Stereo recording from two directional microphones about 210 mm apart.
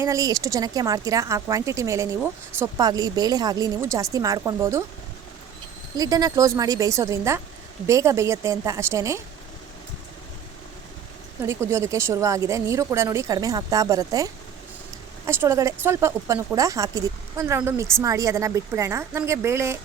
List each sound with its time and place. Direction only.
0.0 s speech: 15° right (ahead or behind)
6.0 s speech: 15° right (ahead or behind)
11.4 s speech: 15° right (ahead or behind)
15.3 s speech: 15° right (ahead or behind)